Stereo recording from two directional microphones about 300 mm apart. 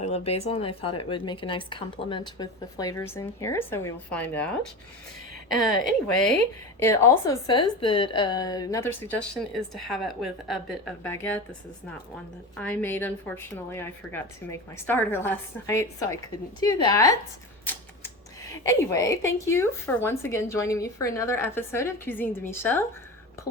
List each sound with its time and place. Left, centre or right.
0.0 s a woman's voice: left; by 4.4 s centre
6.7 s a woman's voice: centre
12.5 s a woman's voice: centre
18.6 s a woman's voice: centre